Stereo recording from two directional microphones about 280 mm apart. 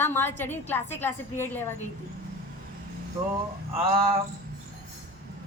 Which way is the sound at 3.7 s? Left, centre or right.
Right.